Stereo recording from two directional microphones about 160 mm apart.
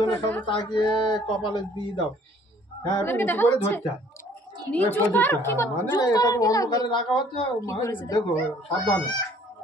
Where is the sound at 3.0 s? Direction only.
10° left (ahead or behind).